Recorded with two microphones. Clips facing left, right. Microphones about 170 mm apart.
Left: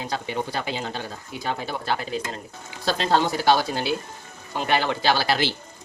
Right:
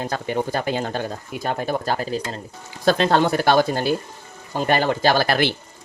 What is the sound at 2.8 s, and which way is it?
Speech, 55° right (ahead or behind).